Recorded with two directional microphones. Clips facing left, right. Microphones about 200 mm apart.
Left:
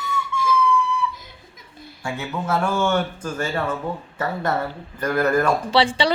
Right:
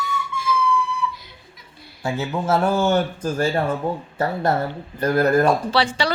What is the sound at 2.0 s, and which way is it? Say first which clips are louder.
Speech: right 4 dB; 30° right (ahead or behind).